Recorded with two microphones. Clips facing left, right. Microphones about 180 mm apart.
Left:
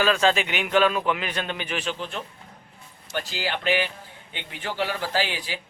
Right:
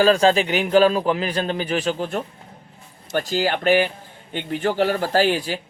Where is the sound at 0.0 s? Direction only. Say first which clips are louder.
Right 6 dB; 35° right (ahead or behind).